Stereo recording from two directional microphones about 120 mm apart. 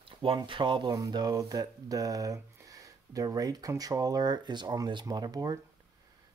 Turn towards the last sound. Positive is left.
turn(degrees=-35)  # may be behind; listen again after turning